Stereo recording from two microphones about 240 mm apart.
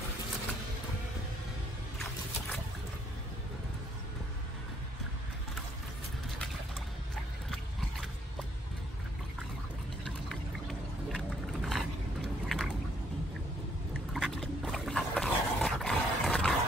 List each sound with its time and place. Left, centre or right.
10.7 s a sound: centre
12.4 s boat: centre
14.1 s dog: centre